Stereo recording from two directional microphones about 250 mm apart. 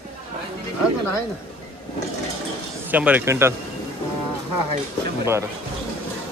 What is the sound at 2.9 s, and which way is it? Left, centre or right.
Speech, centre.